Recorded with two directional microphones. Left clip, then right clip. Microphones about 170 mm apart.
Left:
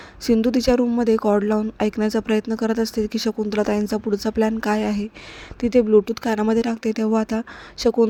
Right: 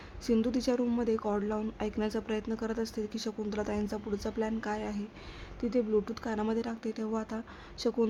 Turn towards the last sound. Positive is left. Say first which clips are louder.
# left 13 dB
turn(degrees=45)  # may be behind; listen again after turning